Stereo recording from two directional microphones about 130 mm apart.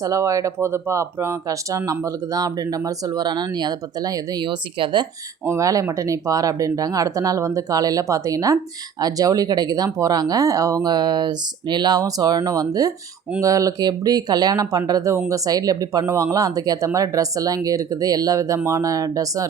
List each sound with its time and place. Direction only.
0.0 s speech: 25° right (ahead or behind)
5.5 s speech: 25° right (ahead or behind)